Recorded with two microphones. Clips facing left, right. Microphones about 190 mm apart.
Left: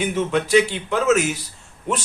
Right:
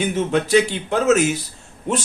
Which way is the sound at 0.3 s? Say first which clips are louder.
Right 1 dB; 40° right (ahead or behind).